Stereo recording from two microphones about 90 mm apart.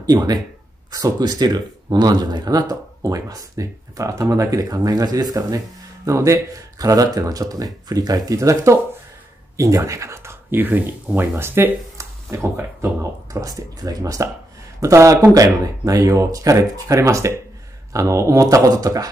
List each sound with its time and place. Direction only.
0.0 s speech: 45° right (ahead or behind); by 12.9 s 30° right (ahead or behind)
13.3 s speech: 40° right (ahead or behind)